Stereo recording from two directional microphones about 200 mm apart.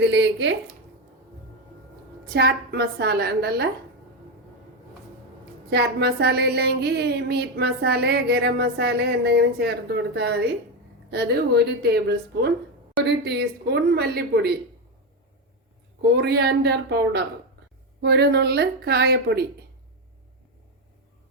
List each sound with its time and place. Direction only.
0.1 s speech: 65° right (ahead or behind)
2.3 s a woman's voice: 50° right (ahead or behind)
5.7 s a woman's voice: 55° right (ahead or behind)
16.0 s speech: 55° right (ahead or behind)